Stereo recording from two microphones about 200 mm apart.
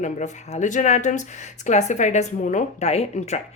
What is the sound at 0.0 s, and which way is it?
A woman's voice, 35° left (ahead or behind).